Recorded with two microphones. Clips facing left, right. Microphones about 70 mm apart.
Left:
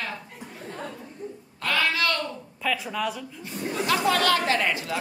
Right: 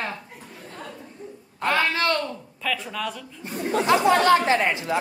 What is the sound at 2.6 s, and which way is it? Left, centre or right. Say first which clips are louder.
Speech: left 1 dB; centre.